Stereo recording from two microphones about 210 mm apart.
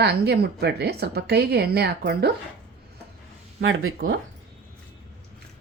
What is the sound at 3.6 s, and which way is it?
Speech, 70° right (ahead or behind).